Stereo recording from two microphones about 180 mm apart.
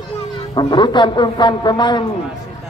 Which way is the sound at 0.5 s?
25° left (ahead or behind).